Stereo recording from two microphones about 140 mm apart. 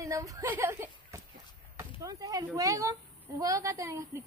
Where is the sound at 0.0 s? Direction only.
25° right (ahead or behind).